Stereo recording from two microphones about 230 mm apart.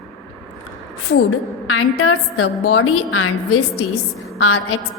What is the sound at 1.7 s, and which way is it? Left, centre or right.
A woman's voice, left.